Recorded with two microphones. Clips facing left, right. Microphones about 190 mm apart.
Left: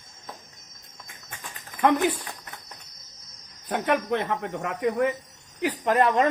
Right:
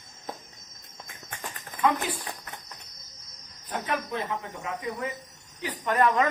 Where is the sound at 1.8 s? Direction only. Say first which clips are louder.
Left 4 dB; 65° left (ahead or behind).